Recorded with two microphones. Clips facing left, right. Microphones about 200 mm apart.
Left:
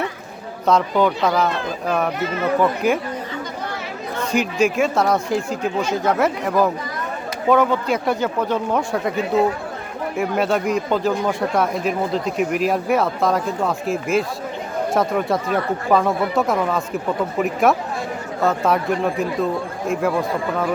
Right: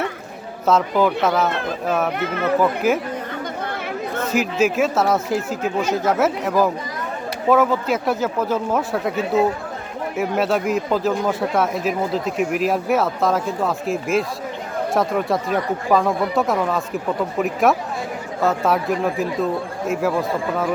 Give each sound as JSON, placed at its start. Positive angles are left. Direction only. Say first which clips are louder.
{"t": 0.6, "sound": "speech", "louder": "even", "side_deg": -5}
{"t": 2.1, "sound": "speech", "louder": "even", "side_deg": -55}
{"t": 2.4, "sound": "speech", "louder": "even", "side_deg": -5}
{"t": 4.3, "sound": "speech", "louder": "left 1 dB", "side_deg": -5}